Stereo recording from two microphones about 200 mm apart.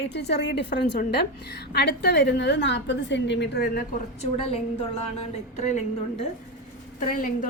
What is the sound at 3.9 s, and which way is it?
A woman's voice, 30° left (ahead or behind).